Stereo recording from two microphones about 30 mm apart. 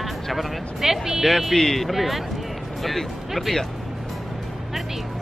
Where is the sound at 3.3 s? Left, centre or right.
Centre.